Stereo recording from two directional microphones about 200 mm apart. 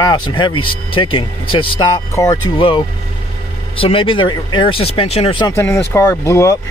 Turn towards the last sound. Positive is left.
turn(degrees=15)  # may be behind; listen again after turning